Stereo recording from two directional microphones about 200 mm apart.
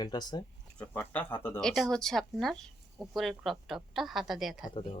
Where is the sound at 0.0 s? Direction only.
20° left (ahead or behind).